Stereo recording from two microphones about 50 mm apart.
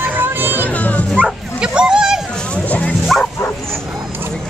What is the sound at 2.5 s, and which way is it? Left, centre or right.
Dog, left.